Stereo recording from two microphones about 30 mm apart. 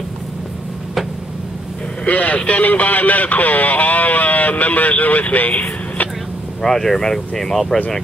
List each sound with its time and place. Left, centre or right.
2.0 s speech: left
6.6 s speech: centre